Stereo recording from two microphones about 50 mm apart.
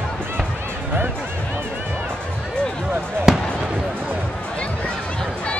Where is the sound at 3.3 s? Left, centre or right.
Centre.